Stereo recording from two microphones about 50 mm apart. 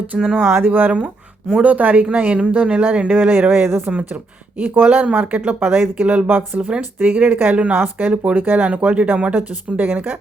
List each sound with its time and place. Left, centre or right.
0.4 s speech: right
3.9 s speech: right
6.6 s speech: right
7.8 s speech: right
8.1 s speech: right
9.3 s speech: right